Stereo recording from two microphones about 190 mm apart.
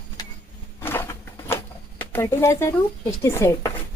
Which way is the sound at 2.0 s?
10° left (ahead or behind).